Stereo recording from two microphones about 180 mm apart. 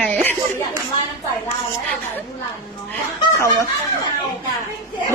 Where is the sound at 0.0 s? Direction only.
10° left (ahead or behind).